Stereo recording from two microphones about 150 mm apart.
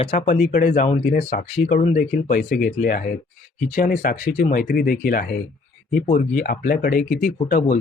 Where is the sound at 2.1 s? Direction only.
70° left (ahead or behind).